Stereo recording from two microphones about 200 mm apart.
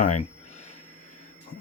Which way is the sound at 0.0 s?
40° left (ahead or behind).